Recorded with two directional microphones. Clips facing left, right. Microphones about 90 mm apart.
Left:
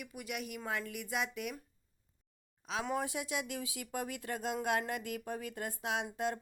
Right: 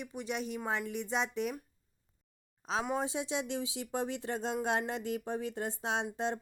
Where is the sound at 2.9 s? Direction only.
25° right (ahead or behind).